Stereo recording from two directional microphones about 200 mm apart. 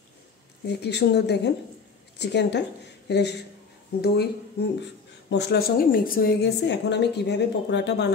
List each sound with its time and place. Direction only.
0.7 s a woman's voice: 55° left (ahead or behind)